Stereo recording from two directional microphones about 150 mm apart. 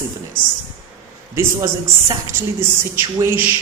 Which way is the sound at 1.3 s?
20° right (ahead or behind).